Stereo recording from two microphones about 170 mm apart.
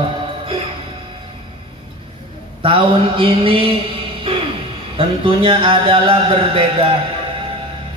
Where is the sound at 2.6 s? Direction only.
35° right (ahead or behind).